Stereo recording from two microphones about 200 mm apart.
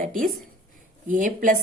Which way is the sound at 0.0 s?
40° right (ahead or behind).